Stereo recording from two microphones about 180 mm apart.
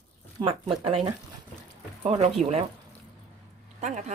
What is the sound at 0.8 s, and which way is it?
Speech, 30° right (ahead or behind).